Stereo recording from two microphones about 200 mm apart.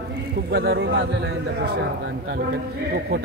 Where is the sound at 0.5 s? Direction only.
55° right (ahead or behind).